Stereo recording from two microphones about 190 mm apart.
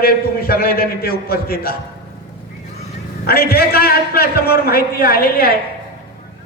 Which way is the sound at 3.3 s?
55° left (ahead or behind).